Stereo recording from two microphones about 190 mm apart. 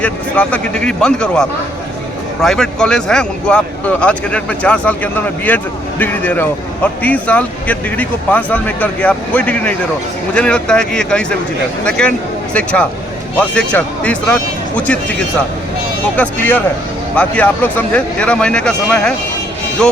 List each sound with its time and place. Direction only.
0.0 s speech: 5° left (ahead or behind)
16.1 s speech: 10° left (ahead or behind)